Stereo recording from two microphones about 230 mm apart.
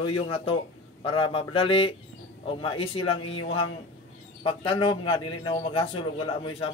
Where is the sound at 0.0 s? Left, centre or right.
Left.